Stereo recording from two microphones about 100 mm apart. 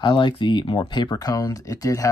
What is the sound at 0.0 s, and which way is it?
Speech, 50° left (ahead or behind).